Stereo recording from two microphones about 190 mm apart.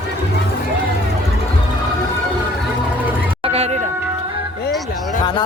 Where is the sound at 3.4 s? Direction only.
35° right (ahead or behind).